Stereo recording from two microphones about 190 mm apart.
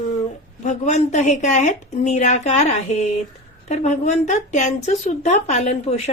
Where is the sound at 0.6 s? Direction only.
40° left (ahead or behind).